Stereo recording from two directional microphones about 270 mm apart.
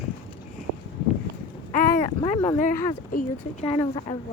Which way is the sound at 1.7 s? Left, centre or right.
Left.